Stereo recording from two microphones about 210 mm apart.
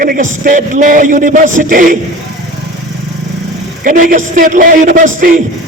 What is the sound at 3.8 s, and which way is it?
A man's voice, 40° right (ahead or behind).